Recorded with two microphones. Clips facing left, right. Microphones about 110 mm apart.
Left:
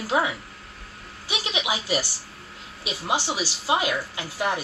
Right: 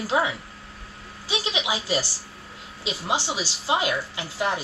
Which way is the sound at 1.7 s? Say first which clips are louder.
Left 2 dB; 20° left (ahead or behind).